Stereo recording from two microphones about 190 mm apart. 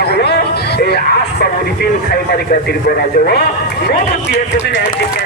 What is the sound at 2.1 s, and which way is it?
Speech, 55° left (ahead or behind).